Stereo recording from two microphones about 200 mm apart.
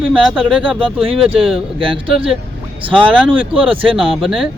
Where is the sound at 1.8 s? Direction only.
25° right (ahead or behind).